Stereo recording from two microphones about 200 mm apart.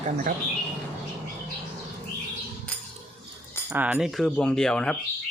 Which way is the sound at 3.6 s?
5° right (ahead or behind).